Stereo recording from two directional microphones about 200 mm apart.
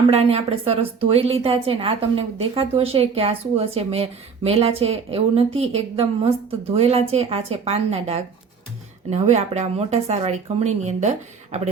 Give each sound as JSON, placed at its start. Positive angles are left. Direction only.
{"t": 0.1, "sound": "a woman's voice", "side_deg": -30}